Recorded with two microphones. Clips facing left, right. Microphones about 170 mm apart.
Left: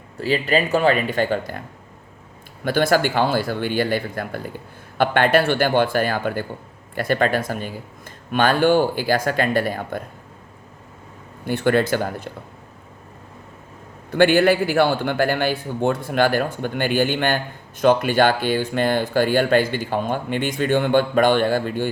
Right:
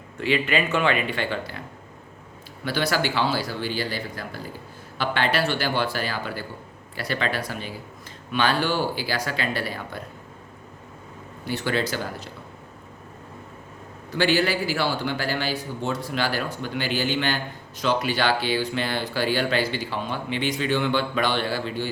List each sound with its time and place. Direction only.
0.2 s speech: 40° left (ahead or behind)
2.6 s a man's voice: 50° left (ahead or behind)
11.4 s a man's voice: 55° left (ahead or behind)
14.1 s a man's voice: 55° left (ahead or behind)